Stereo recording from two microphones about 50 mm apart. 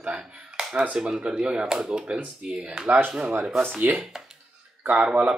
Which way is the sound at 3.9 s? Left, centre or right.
Right.